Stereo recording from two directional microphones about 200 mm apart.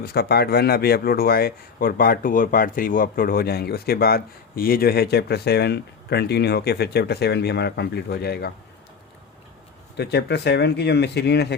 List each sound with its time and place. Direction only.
0.0 s speech: 55° left (ahead or behind)
10.0 s speech: 55° left (ahead or behind)